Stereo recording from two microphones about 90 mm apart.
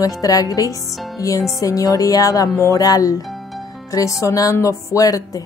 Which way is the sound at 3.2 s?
Centre (ahead or behind).